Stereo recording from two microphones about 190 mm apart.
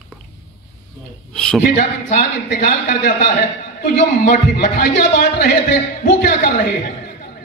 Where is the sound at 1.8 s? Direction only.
45° left (ahead or behind).